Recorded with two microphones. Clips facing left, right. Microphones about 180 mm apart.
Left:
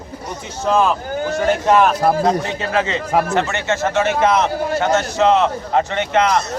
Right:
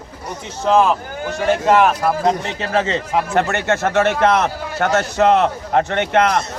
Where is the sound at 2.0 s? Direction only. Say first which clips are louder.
Left 3 dB; 35° left (ahead or behind).